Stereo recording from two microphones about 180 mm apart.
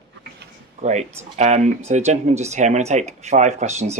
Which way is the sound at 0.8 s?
40° right (ahead or behind).